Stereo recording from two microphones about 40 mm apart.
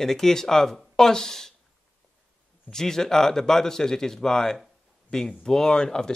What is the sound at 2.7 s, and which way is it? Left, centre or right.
Speech, centre.